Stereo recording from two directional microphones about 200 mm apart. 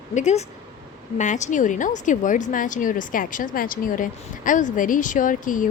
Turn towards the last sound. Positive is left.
turn(degrees=40)  # may be behind; listen again after turning